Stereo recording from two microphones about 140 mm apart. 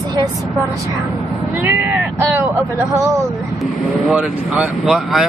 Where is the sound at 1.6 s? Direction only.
15° right (ahead or behind).